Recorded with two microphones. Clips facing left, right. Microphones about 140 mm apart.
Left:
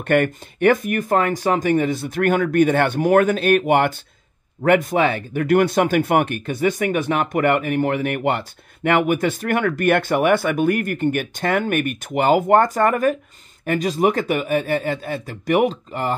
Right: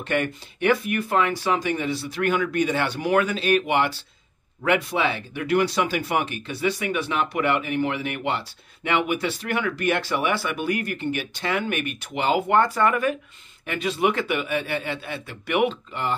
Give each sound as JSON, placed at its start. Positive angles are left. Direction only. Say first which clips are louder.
{"t": 0.0, "sound": "speech", "louder": "left 7 dB", "side_deg": 50}